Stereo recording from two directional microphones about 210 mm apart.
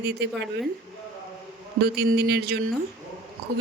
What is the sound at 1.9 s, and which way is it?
Speech, 50° right (ahead or behind).